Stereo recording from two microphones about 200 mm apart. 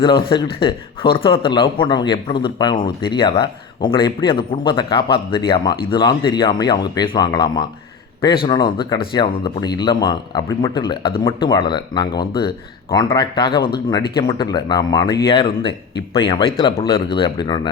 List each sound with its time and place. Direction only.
0.0 s speech: 25° left (ahead or behind)
16.6 s speech: 25° left (ahead or behind)